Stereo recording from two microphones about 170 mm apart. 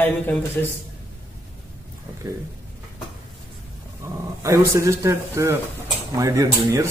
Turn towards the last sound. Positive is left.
turn(degrees=-20)  # may be behind; listen again after turning